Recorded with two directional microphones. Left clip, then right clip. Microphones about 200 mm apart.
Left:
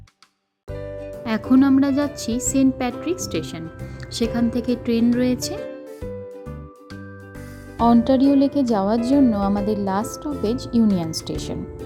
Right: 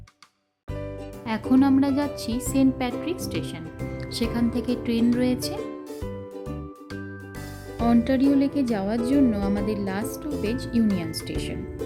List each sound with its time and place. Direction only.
1.2 s speech: 15° left (ahead or behind)
7.8 s speech: 10° left (ahead or behind)
9.3 s speech: 10° right (ahead or behind)
9.6 s speech: 10° left (ahead or behind)